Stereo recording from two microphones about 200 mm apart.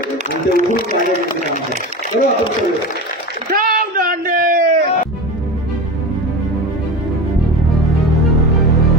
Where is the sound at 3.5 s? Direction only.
45° right (ahead or behind).